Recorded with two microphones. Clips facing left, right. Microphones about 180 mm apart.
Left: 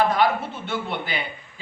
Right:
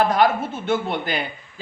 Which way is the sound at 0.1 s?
45° right (ahead or behind).